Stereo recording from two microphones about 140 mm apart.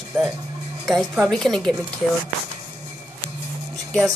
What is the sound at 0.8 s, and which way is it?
Speech, centre (ahead or behind).